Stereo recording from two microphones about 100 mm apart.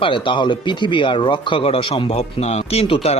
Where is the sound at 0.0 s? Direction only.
55° left (ahead or behind).